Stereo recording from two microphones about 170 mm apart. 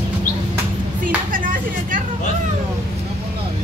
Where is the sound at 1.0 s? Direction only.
50° right (ahead or behind).